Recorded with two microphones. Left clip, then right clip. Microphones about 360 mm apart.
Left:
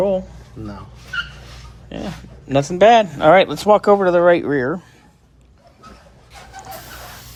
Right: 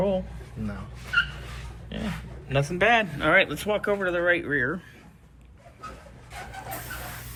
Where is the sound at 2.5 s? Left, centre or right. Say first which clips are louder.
Left 10 dB; centre.